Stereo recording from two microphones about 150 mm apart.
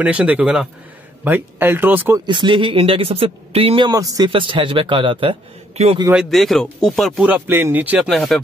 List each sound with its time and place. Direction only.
0.0 s speech: 10° right (ahead or behind)
2.1 s speech: 30° right (ahead or behind)
3.9 s speech: 25° right (ahead or behind)
4.3 s speech: 35° right (ahead or behind)
6.1 s speech: centre (ahead or behind)
7.2 s speech: 10° right (ahead or behind)
8.1 s speech: centre (ahead or behind)